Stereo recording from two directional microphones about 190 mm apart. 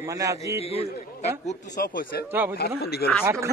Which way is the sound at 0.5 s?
30° left (ahead or behind).